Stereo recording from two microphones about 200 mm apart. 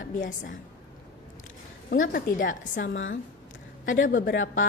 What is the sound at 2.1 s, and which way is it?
Speech, 45° left (ahead or behind).